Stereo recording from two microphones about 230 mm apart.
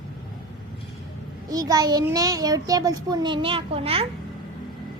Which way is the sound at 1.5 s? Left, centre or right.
Centre.